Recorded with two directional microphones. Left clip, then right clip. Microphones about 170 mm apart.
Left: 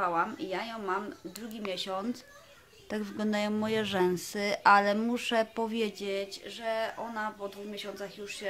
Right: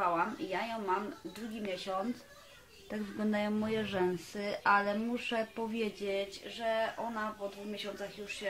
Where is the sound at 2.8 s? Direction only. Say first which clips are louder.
Left 3 dB; 25° left (ahead or behind).